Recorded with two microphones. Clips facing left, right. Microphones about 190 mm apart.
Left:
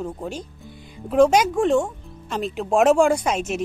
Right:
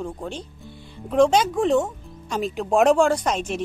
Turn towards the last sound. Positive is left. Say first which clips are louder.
# left 1 dB
turn(degrees=5)  # may be behind; listen again after turning